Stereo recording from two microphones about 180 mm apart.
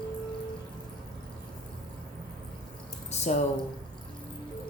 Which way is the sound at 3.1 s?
40° left (ahead or behind).